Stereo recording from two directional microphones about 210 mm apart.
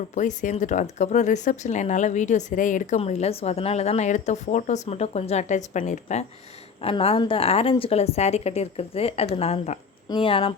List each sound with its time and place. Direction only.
0.1 s a woman's voice: 35° left (ahead or behind)